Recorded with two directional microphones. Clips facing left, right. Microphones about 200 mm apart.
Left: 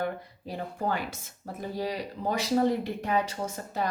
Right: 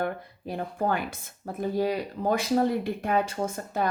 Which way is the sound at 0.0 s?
55° right (ahead or behind).